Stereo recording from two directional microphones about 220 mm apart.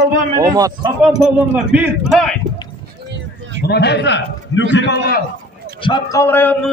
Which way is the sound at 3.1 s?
55° right (ahead or behind).